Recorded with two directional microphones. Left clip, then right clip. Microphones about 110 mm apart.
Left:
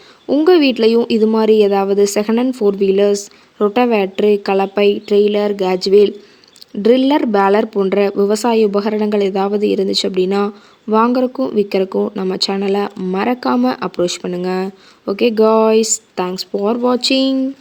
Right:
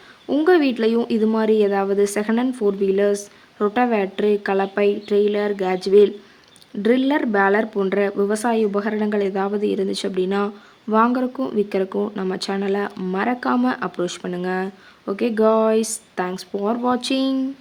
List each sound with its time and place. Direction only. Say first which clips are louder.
0.4 s a woman's voice: left 6 dB; 45° left (ahead or behind)
13.0 s a woman's voice: left 5 dB; 30° left (ahead or behind)
13.2 s a woman's voice: left 5 dB; 45° left (ahead or behind)